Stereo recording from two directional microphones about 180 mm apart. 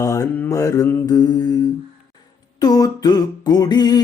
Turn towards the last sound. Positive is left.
turn(degrees=20)  # may be behind; listen again after turning